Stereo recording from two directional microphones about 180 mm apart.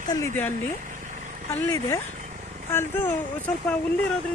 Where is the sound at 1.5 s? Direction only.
15° left (ahead or behind).